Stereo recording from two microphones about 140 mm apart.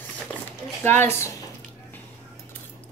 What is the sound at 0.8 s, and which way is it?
Speech, 15° left (ahead or behind).